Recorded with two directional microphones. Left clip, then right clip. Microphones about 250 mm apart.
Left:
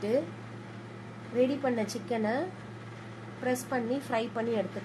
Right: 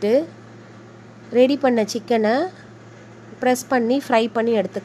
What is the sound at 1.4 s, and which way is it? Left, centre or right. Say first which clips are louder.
A woman's voice: right 12 dB; right.